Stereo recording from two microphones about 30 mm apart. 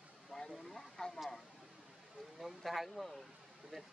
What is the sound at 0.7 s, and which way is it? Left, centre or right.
Speech, centre.